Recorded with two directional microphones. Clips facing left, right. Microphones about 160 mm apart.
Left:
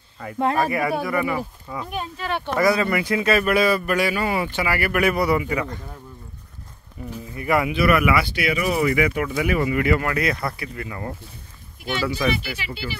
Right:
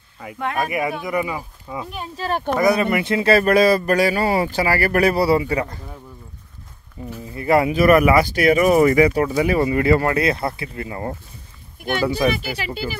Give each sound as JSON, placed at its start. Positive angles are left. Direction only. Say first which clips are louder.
{"t": 0.2, "sound": "speech", "louder": "left 3 dB", "side_deg": -10}
{"t": 2.1, "sound": "speech", "louder": "right 7 dB", "side_deg": -40}
{"t": 2.6, "sound": "speech", "louder": "right 1 dB", "side_deg": -20}
{"t": 7.0, "sound": "speech", "louder": "right 2 dB", "side_deg": -25}
{"t": 11.8, "sound": "speech", "louder": "right 4 dB", "side_deg": -50}